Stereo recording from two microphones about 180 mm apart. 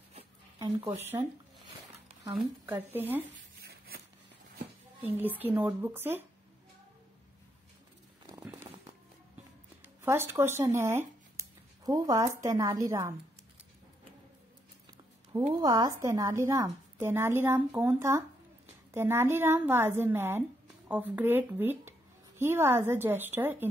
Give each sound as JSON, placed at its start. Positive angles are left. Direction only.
{"t": 2.6, "sound": "speech", "side_deg": -10}
{"t": 3.6, "sound": "a sound", "side_deg": -55}
{"t": 5.0, "sound": "speech", "side_deg": -10}
{"t": 8.3, "sound": "firecracker", "side_deg": -20}
{"t": 10.0, "sound": "speech", "side_deg": -15}
{"t": 15.3, "sound": "speech", "side_deg": -20}